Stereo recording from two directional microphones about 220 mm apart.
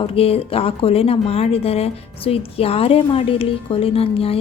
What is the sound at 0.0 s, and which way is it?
Speech, 25° left (ahead or behind).